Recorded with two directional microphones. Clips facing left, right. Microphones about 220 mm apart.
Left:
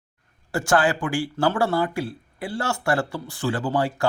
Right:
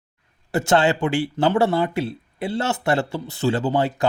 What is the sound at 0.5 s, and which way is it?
A man's voice, 20° right (ahead or behind).